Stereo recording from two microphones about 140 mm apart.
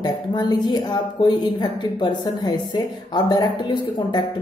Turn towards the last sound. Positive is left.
turn(degrees=30)  # may be behind; listen again after turning